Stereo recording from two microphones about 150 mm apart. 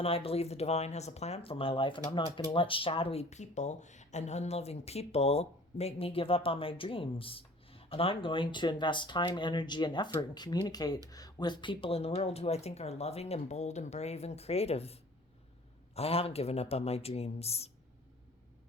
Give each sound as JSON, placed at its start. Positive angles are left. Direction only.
{"t": 0.0, "sound": "speech", "side_deg": 40}